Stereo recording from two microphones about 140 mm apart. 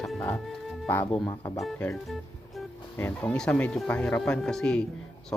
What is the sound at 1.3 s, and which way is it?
Speech, 25° left (ahead or behind).